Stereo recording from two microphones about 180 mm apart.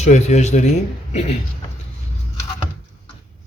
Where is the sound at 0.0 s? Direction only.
40° left (ahead or behind).